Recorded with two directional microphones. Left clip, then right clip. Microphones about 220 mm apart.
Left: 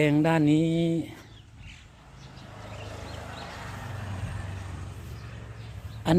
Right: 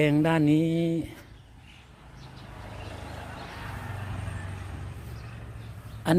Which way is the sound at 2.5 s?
20° left (ahead or behind).